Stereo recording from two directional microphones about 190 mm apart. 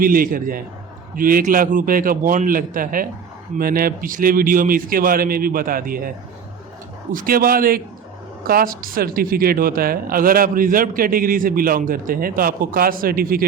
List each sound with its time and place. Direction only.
0.0 s speech: 50° right (ahead or behind)
7.1 s speech: 50° right (ahead or behind)